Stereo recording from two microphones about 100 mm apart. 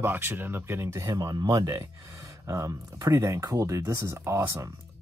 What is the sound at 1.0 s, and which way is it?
Speech, 40° right (ahead or behind).